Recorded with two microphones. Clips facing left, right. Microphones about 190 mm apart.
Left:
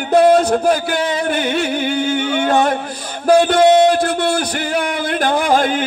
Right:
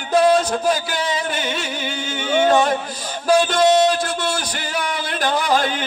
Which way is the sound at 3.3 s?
60° left (ahead or behind).